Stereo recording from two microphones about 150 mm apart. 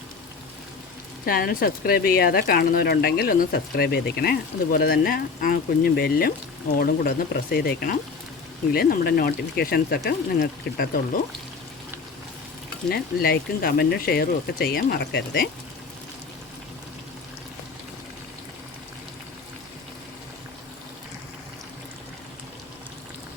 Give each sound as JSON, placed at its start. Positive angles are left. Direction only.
{"t": 1.2, "sound": "speech", "side_deg": 80}
{"t": 12.9, "sound": "speech", "side_deg": 90}